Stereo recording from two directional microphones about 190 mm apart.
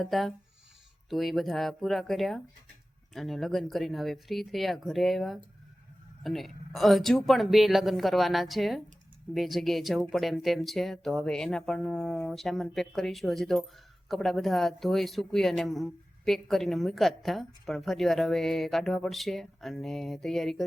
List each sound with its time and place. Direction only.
0.0 s speech: centre (ahead or behind)